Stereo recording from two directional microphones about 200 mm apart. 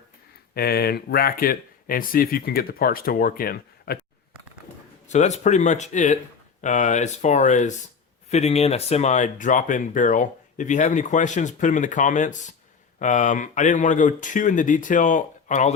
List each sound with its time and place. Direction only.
0.5 s speech: 50° left (ahead or behind)
5.0 s speech: 35° left (ahead or behind)